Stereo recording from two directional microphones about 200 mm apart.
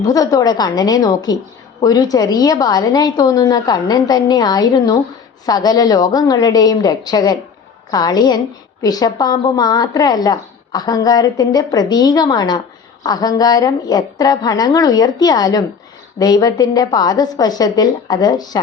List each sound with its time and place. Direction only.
0.0 s a woman's voice: 20° left (ahead or behind)